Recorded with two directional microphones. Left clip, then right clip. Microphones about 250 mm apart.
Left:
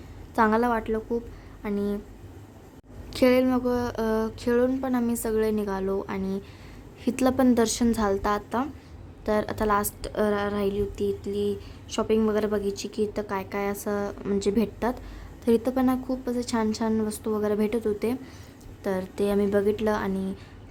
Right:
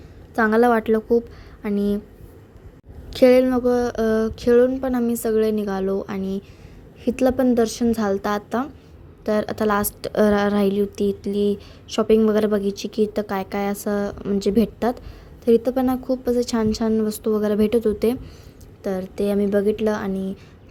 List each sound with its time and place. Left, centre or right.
0.3 s a woman's voice: centre
3.1 s a woman's voice: centre